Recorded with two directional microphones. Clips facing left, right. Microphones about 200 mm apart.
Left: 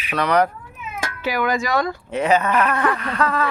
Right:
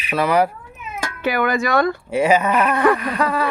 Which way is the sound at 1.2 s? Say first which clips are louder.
Right 2 dB; 60° right (ahead or behind).